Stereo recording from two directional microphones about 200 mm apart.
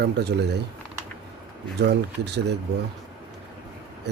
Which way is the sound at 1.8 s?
55° right (ahead or behind).